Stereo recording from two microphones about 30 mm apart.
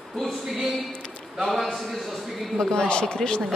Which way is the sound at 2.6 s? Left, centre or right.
Left.